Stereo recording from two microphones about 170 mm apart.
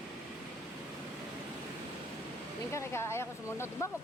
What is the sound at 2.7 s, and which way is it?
Speech, 15° left (ahead or behind).